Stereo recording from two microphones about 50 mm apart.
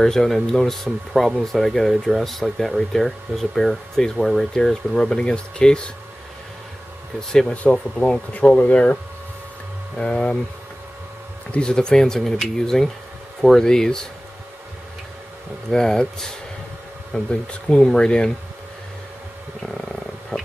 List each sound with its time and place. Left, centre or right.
0.0 s speech: centre
7.2 s speech: centre
7.5 s speech: left
9.9 s speech: left
11.5 s speech: centre
15.7 s speech: centre
19.7 s wild animals: centre